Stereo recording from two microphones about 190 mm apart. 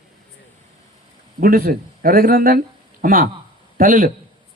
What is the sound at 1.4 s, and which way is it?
A man's voice, 50° right (ahead or behind).